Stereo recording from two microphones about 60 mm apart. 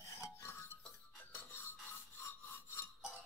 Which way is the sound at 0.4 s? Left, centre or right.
Left.